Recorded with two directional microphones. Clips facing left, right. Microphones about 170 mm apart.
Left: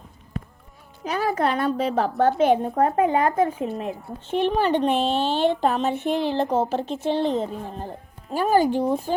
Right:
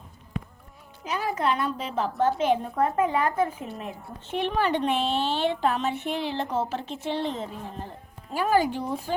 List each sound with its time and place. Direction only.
1.1 s a woman's voice: 50° left (ahead or behind)
2.6 s speech: 40° left (ahead or behind)